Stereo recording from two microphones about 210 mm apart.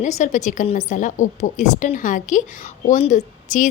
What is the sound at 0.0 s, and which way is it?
A woman's voice, 35° left (ahead or behind).